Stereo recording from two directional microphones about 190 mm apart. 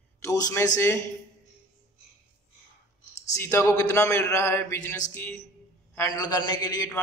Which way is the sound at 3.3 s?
15° left (ahead or behind).